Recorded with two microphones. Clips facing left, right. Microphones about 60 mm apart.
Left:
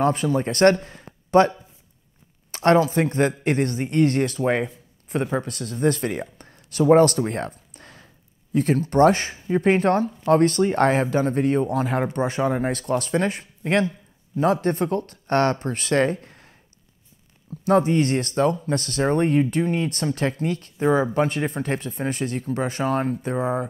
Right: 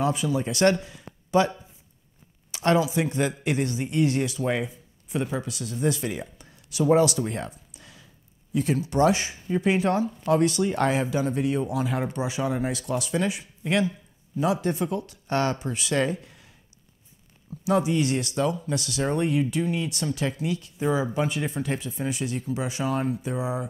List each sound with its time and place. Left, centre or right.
0.0 s a man's voice: left
2.5 s speech: left
17.6 s speech: left